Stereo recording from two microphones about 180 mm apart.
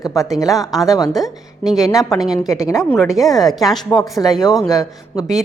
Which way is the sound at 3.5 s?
Centre (ahead or behind).